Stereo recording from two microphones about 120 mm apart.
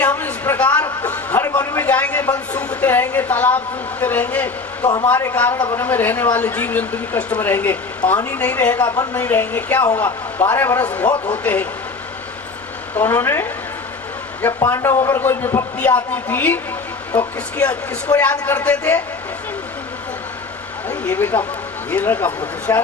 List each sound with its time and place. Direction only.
0.0 s a sound: 15° left (ahead or behind)
4.0 s speech: 15° left (ahead or behind)
13.0 s speech: 20° left (ahead or behind)
14.6 s speech: 25° left (ahead or behind)
21.0 s speech: 15° left (ahead or behind)